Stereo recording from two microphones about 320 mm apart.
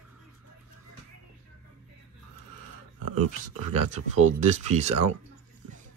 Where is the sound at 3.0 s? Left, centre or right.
Right.